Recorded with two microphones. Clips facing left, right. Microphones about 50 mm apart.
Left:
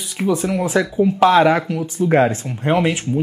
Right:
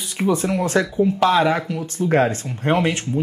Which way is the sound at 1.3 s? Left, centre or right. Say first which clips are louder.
Left 4 dB; left.